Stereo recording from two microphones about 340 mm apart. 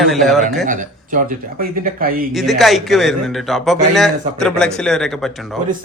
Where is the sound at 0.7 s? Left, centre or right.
Right.